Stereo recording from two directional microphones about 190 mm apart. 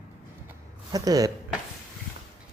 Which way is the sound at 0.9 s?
20° right (ahead or behind).